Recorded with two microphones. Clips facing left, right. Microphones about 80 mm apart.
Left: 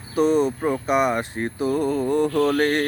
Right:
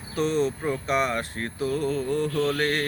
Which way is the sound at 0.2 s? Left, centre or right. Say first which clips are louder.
Left 6 dB; centre.